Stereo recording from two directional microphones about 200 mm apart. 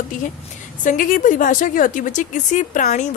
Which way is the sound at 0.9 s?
40° left (ahead or behind).